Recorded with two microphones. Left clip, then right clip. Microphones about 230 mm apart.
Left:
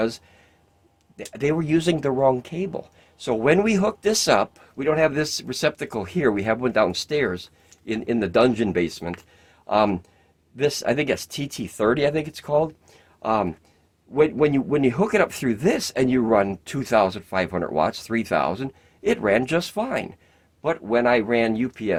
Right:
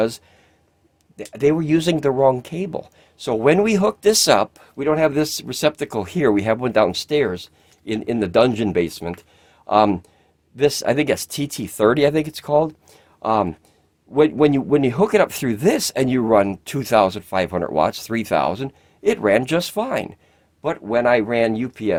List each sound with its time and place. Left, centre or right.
1.3 s speech: right